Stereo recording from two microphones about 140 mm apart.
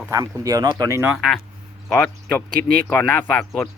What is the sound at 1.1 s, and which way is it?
Speech, centre (ahead or behind).